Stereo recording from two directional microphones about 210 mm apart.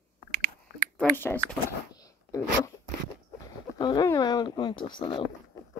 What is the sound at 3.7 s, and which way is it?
Speech, 20° left (ahead or behind).